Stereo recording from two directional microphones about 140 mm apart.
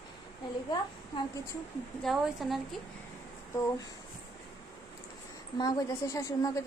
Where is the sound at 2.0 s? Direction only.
Centre (ahead or behind).